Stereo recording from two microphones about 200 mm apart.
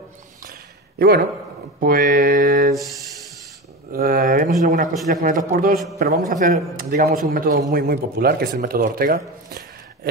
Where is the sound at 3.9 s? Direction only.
45° right (ahead or behind).